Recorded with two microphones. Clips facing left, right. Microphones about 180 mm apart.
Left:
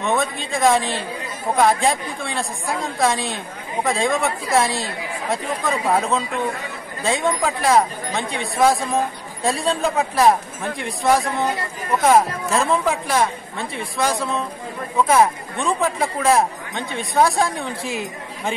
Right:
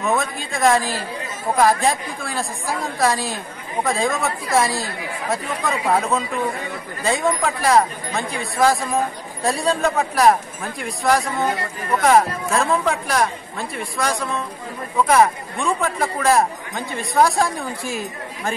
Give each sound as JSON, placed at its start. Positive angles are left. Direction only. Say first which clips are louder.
{"t": 0.0, "sound": "speech", "louder": "even", "side_deg": 0}